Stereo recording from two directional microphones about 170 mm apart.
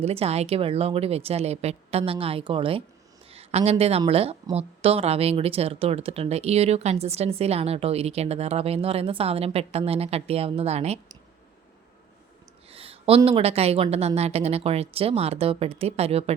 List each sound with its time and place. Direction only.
0.0 s a woman's voice: 35° right (ahead or behind)
12.7 s speech: 35° right (ahead or behind)